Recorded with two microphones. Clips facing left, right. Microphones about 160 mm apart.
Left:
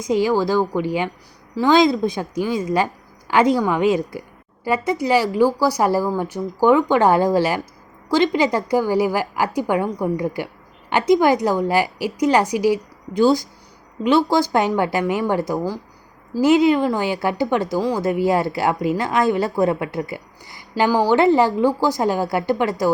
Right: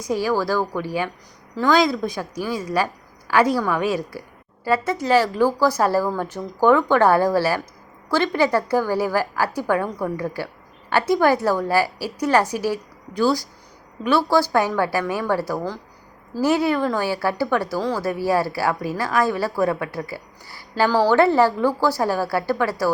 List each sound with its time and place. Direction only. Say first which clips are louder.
0.0 s a woman's voice: left 4 dB; 20° left (ahead or behind)